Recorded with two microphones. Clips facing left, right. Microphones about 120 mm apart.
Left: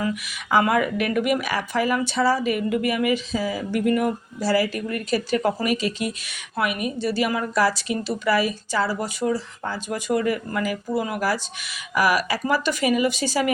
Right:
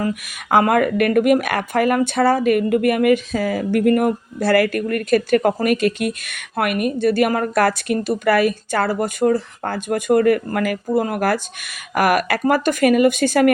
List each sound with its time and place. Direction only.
0.0 s speech: 45° right (ahead or behind)